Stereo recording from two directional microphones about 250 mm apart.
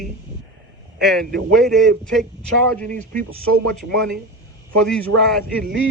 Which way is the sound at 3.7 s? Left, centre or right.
Centre.